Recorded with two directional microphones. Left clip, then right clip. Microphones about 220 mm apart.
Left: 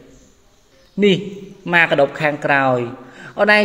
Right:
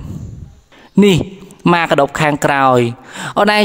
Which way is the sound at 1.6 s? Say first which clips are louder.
Right 2 dB; 40° right (ahead or behind).